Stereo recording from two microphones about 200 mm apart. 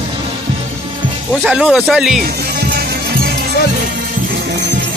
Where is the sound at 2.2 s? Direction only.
50° right (ahead or behind).